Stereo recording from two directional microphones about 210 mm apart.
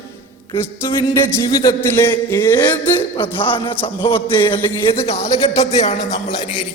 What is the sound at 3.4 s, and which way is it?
Speech, 25° left (ahead or behind).